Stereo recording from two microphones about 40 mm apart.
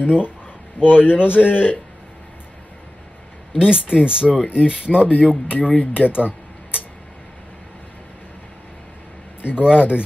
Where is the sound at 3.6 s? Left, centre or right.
Right.